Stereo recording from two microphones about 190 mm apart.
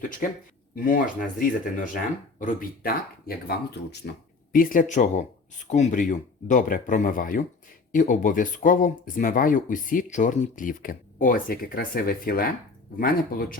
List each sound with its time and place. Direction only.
0.9 s speech: 45° left (ahead or behind)
4.5 s speech: 45° left (ahead or behind)